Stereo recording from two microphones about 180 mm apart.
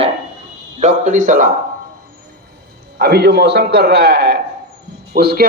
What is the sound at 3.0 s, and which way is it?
A man's voice, 65° right (ahead or behind).